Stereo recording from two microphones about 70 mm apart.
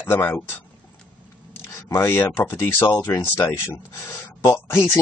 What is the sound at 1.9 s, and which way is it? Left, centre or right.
Speech, left.